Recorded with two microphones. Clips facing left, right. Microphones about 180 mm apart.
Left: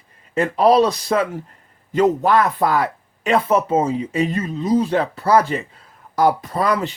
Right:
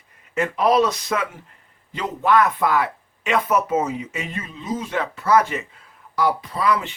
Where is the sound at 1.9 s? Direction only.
45° left (ahead or behind).